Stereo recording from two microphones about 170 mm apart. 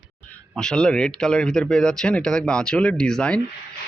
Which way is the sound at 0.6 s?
5° left (ahead or behind).